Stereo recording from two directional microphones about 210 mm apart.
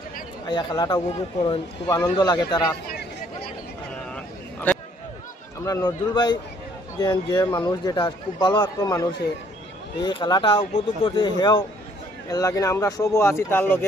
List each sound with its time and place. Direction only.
0.5 s a man's voice: 20° left (ahead or behind)
4.1 s a sound: 10° left (ahead or behind)
5.6 s a man's voice: 15° left (ahead or behind)